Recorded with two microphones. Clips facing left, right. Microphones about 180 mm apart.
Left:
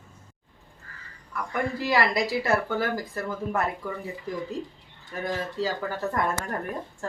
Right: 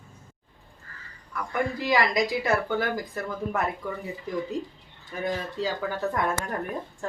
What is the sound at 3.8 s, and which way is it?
Speech, centre (ahead or behind).